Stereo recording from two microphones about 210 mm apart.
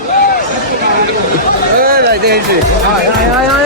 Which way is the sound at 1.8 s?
45° right (ahead or behind).